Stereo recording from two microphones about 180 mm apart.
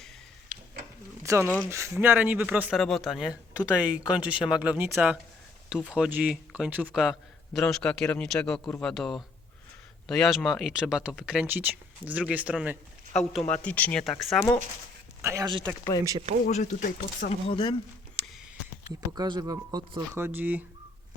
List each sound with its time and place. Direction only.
0.4 s a sound: 50° right (ahead or behind)
1.2 s speech: 15° right (ahead or behind)
2.7 s speech: centre (ahead or behind)
13.1 s speech: 5° left (ahead or behind)
14.3 s speech: 15° left (ahead or behind)
15.2 s speech: 15° right (ahead or behind)
16.5 s speech: 40° left (ahead or behind)
17.5 s speech: 30° left (ahead or behind)
19.1 s speech: 20° right (ahead or behind)